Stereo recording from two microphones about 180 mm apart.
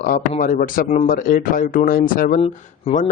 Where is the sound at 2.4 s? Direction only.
35° left (ahead or behind).